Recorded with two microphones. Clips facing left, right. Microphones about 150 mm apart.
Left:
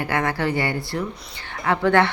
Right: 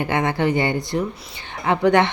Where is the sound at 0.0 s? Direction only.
20° right (ahead or behind).